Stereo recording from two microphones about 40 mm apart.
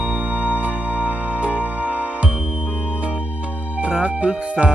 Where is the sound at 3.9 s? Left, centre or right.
Right.